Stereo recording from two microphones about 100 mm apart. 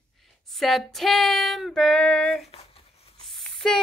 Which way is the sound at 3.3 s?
5° left (ahead or behind).